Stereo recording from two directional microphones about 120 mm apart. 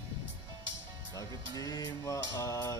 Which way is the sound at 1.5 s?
30° left (ahead or behind).